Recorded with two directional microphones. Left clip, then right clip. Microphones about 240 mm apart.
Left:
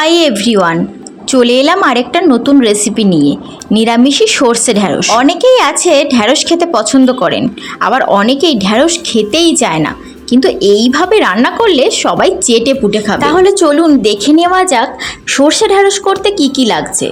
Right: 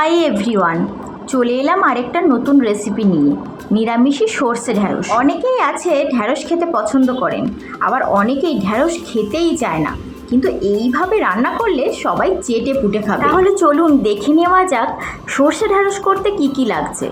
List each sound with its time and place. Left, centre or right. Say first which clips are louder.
0.0 s speech: left 5 dB; left